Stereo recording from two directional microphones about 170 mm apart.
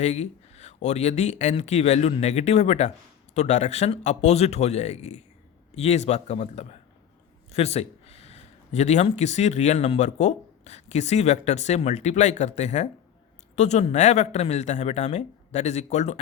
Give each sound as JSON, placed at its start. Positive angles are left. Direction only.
{"t": 0.0, "sound": "speech", "side_deg": 40}